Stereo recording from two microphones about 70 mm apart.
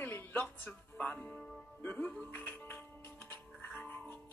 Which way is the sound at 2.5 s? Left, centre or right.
Left.